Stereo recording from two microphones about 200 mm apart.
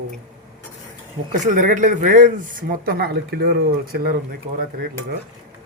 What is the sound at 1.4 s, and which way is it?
Speech, 40° right (ahead or behind).